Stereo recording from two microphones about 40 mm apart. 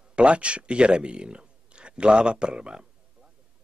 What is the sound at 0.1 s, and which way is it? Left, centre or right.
Speech, right.